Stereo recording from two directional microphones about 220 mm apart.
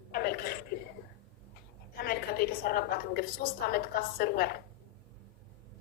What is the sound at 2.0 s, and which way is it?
A woman's voice, 45° left (ahead or behind).